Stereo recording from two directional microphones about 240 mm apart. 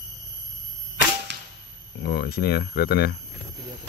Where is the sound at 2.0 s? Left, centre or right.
Left.